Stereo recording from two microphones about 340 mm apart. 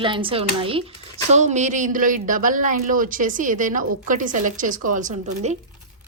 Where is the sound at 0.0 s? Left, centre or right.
Centre.